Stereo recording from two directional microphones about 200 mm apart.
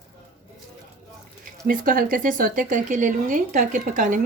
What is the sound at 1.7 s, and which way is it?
A woman's voice, 45° right (ahead or behind).